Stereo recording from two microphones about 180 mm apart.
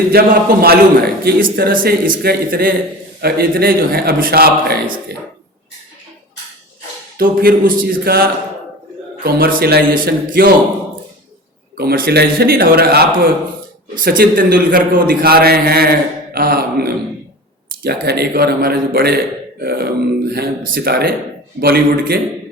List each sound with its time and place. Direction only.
0.1 s a man's voice: 60° right (ahead or behind)
7.2 s a man's voice: 55° right (ahead or behind)
11.8 s a man's voice: 60° right (ahead or behind)